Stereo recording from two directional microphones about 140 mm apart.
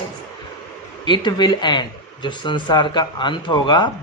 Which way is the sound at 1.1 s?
30° left (ahead or behind).